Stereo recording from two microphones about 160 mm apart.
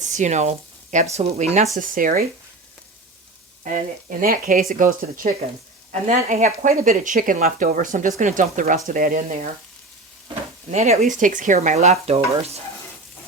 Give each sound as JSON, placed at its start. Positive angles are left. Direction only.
{"t": 0.0, "sound": "speech", "side_deg": -50}
{"t": 1.7, "sound": "speech", "side_deg": -60}
{"t": 3.6, "sound": "speech", "side_deg": -55}
{"t": 10.7, "sound": "speech", "side_deg": -45}